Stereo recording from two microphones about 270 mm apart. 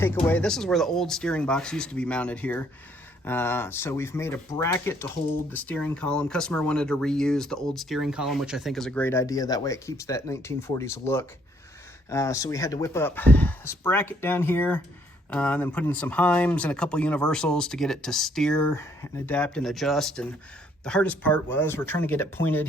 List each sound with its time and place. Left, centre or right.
0.0 s speech: centre